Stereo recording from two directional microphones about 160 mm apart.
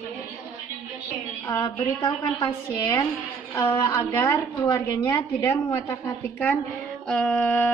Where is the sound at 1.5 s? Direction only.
20° left (ahead or behind).